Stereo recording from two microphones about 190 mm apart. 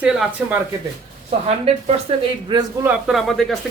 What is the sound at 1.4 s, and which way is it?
Speech, 30° right (ahead or behind).